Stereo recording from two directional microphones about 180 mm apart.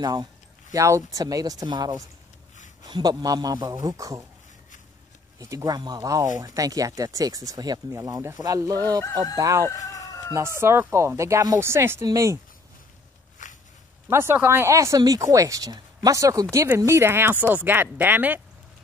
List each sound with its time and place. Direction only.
0.0 s speech: 25° right (ahead or behind)
5.4 s speech: 20° right (ahead or behind)
9.7 s chicken: 20° left (ahead or behind)
10.3 s speech: 15° right (ahead or behind)
13.4 s walk: 45° left (ahead or behind)
14.0 s speech: 15° right (ahead or behind)